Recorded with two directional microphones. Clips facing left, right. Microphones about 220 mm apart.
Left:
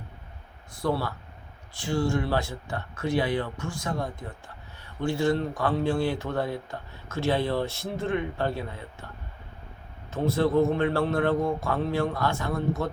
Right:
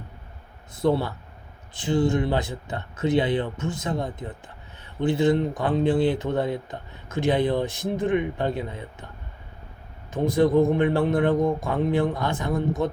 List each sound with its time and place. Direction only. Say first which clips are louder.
0.7 s speech: right 5 dB; 20° right (ahead or behind)
10.1 s speech: right 4 dB; 15° right (ahead or behind)